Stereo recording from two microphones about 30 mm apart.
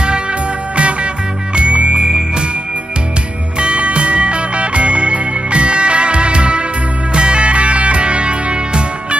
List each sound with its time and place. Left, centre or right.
0.0 s music: right
2.0 s music: right
3.5 s music: right